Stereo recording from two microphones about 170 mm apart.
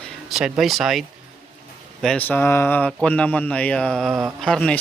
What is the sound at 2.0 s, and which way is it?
Speech, 10° left (ahead or behind).